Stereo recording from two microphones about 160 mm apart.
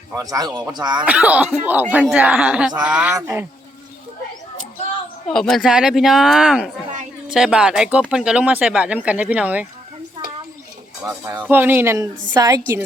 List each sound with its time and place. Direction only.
0.1 s speech: 20° right (ahead or behind)
1.0 s speech: 10° right (ahead or behind)
3.2 s speech: 20° right (ahead or behind)
5.3 s speech: centre (ahead or behind)
11.4 s speech: 10° right (ahead or behind)